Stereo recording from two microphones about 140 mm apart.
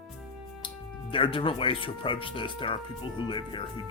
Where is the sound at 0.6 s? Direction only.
40° left (ahead or behind).